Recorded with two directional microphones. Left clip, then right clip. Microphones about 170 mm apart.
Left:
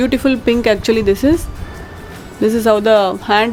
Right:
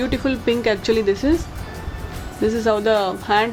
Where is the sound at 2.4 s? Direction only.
40° left (ahead or behind).